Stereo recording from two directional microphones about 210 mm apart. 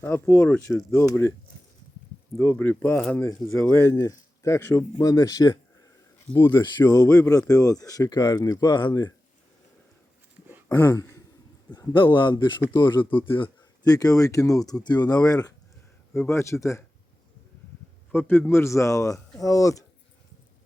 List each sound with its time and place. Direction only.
0.0 s speech: 10° left (ahead or behind)
2.4 s speech: 10° left (ahead or behind)
10.7 s a sound: 15° left (ahead or behind)
11.7 s a man's voice: 20° left (ahead or behind)
18.1 s speech: 10° left (ahead or behind)